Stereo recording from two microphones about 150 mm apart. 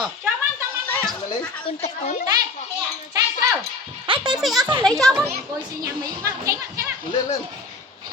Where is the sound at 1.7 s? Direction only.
50° left (ahead or behind).